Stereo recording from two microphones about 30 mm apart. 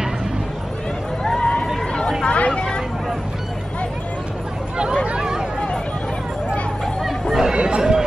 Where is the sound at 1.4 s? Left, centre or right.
Left.